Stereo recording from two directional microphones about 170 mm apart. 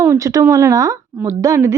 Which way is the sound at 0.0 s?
15° right (ahead or behind).